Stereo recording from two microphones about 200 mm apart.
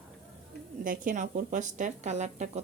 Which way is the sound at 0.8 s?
40° right (ahead or behind).